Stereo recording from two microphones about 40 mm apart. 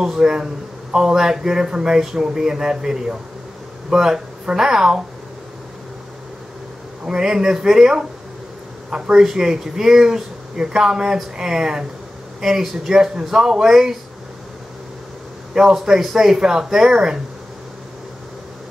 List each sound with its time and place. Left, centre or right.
0.0 s speech: centre
7.1 s speech: centre
15.5 s speech: centre